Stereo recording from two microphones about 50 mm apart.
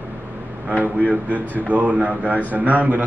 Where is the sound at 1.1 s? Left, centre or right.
Right.